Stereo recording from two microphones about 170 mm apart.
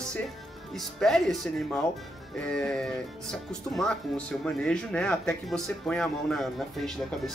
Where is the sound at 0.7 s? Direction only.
Centre (ahead or behind).